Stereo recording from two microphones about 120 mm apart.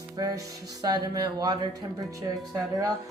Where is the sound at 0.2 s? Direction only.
30° right (ahead or behind).